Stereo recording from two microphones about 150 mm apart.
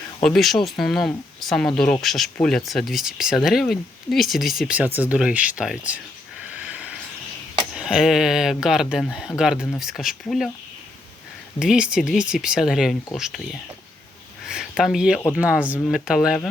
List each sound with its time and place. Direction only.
0.2 s speech: centre (ahead or behind)
6.7 s a sound: 10° right (ahead or behind)
7.8 s speech: 5° right (ahead or behind)
11.6 s speech: 5° right (ahead or behind)
14.4 s a sound: 5° right (ahead or behind)
15.3 s speech: 10° right (ahead or behind)